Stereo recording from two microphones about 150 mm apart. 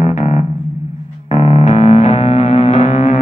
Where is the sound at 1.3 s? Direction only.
45° left (ahead or behind).